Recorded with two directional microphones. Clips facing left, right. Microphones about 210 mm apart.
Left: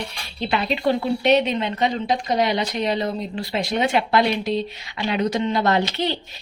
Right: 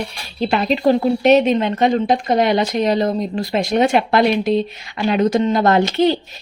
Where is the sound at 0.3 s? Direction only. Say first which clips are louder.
Right 6 dB; 45° right (ahead or behind).